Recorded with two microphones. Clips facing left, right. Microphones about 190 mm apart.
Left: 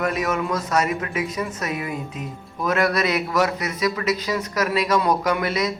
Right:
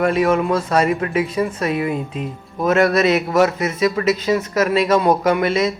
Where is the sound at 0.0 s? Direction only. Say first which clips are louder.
Right 7 dB; 30° right (ahead or behind).